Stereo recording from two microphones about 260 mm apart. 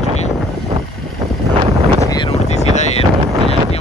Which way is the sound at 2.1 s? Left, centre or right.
Left.